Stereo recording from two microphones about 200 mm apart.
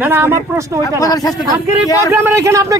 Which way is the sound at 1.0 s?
20° left (ahead or behind).